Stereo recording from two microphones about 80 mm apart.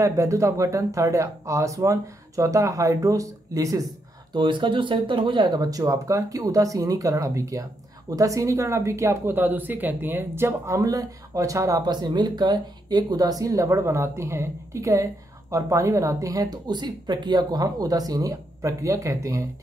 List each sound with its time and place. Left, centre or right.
0.0 s speech: right
4.3 s speech: right
10.8 s speech: right
11.8 s speech: right